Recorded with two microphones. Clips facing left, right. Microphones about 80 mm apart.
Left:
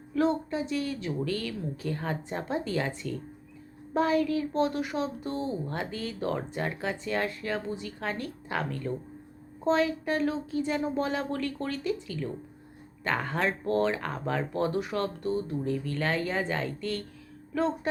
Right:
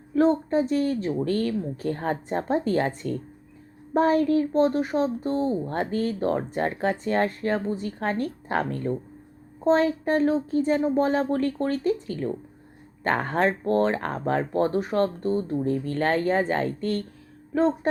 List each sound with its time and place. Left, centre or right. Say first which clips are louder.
0.1 s a woman's voice: right 6 dB; right